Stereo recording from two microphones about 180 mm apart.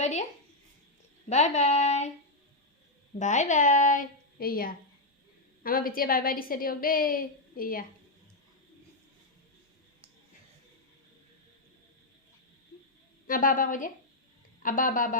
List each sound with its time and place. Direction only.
0.0 s a woman's voice: 40° left (ahead or behind)
1.3 s speech: 40° left (ahead or behind)
3.2 s a woman's voice: 40° left (ahead or behind)
13.2 s a woman's voice: 50° left (ahead or behind)